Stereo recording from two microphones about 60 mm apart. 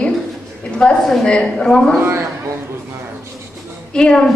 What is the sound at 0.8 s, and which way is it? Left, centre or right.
A woman's voice, centre.